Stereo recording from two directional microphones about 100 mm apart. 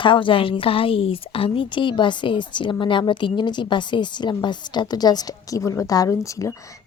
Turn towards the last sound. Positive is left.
turn(degrees=35)  # may be behind; listen again after turning